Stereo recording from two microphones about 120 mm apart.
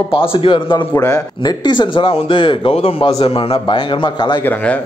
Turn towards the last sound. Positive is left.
turn(degrees=15)  # may be behind; listen again after turning